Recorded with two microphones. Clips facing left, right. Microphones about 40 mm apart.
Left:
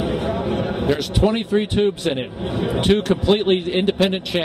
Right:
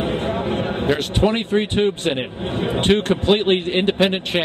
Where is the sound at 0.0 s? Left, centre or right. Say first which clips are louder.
Even; right.